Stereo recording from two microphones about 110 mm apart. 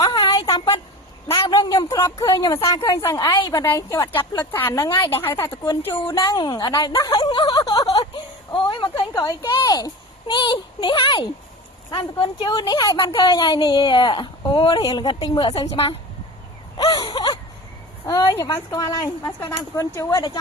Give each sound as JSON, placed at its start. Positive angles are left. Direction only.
{"t": 0.1, "sound": "a sound", "side_deg": 40}
{"t": 2.6, "sound": "speech", "side_deg": 30}
{"t": 4.9, "sound": "speech", "side_deg": 50}
{"t": 7.6, "sound": "a sound", "side_deg": 55}
{"t": 9.1, "sound": "speech", "side_deg": 35}
{"t": 15.7, "sound": "a woman's voice", "side_deg": 60}
{"t": 16.7, "sound": "a sound", "side_deg": 40}
{"t": 18.0, "sound": "speech", "side_deg": 30}
{"t": 18.8, "sound": "speech", "side_deg": 40}